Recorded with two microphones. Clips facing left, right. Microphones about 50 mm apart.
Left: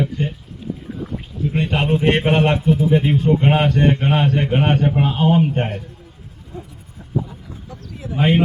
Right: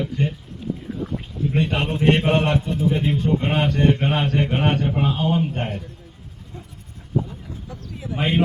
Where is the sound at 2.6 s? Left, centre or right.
Centre.